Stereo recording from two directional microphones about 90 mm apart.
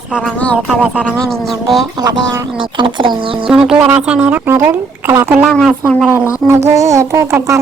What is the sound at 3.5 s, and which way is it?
Speech, 5° right (ahead or behind).